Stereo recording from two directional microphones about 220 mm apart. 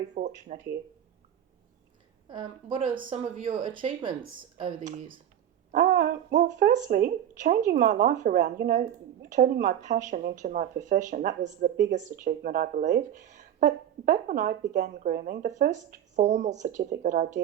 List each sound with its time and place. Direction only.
0.1 s speech: 35° right (ahead or behind)
2.3 s speech: 20° right (ahead or behind)